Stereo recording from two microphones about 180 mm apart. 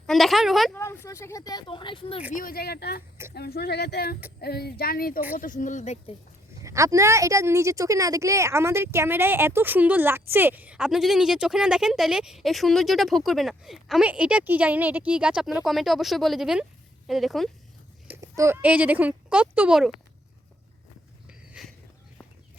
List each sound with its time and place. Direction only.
0.1 s a woman's voice: centre (ahead or behind)
0.7 s speech: 15° left (ahead or behind)
2.3 s speech: 55° left (ahead or behind); by 6.1 s 35° left (ahead or behind)
6.6 s a woman's voice: 15° right (ahead or behind); by 17.5 s centre (ahead or behind)
18.1 s a woman's voice: 15° right (ahead or behind)
21.2 s a sound: 5° right (ahead or behind)